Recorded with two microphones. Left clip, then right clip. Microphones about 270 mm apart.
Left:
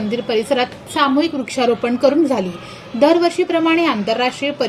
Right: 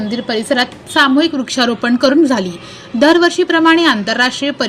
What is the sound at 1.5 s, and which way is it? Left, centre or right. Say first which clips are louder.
Speech: even; right.